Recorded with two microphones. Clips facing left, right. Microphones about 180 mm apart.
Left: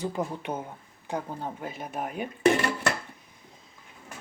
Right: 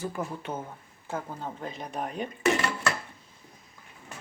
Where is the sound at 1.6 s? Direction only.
5° left (ahead or behind).